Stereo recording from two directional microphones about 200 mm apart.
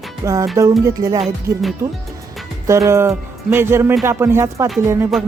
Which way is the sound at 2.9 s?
15° right (ahead or behind).